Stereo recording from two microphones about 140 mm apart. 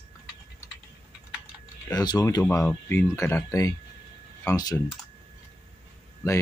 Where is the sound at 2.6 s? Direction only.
10° left (ahead or behind); by 4.7 s 25° left (ahead or behind).